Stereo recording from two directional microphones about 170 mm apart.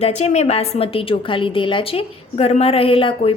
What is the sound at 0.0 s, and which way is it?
A woman's voice, 40° left (ahead or behind).